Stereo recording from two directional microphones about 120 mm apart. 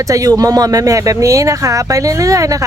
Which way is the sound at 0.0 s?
30° right (ahead or behind).